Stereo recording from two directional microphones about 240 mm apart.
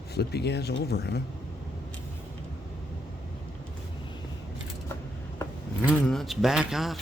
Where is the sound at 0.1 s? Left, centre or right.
Left.